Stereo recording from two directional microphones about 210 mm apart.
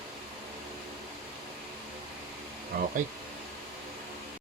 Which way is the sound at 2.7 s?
45° right (ahead or behind).